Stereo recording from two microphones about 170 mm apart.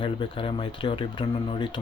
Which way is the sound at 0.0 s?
30° left (ahead or behind).